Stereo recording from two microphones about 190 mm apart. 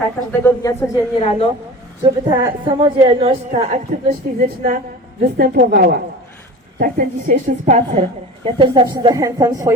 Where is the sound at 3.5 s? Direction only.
40° right (ahead or behind).